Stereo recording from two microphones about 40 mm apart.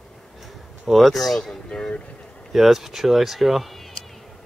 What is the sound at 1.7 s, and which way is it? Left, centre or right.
Speech, left.